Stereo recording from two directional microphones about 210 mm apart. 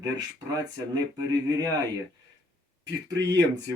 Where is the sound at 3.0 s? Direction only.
15° right (ahead or behind).